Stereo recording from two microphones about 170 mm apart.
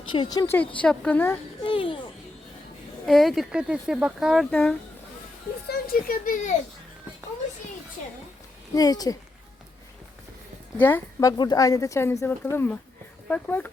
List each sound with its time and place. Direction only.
0.1 s speech: 25° left (ahead or behind)
0.8 s a woman's voice: 5° left (ahead or behind)
1.6 s a sound: 30° left (ahead or behind)
3.1 s speech: centre (ahead or behind)
5.6 s speech: 60° left (ahead or behind)
8.7 s speech: 20° left (ahead or behind)
10.8 s a woman's voice: 10° left (ahead or behind)